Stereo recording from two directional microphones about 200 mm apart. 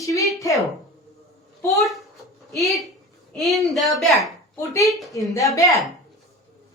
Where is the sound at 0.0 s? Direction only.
15° left (ahead or behind).